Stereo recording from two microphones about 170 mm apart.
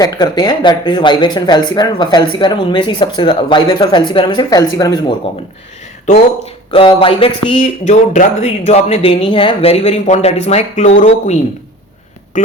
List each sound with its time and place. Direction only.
0.0 s speech: 25° left (ahead or behind)
6.1 s speech: 40° left (ahead or behind)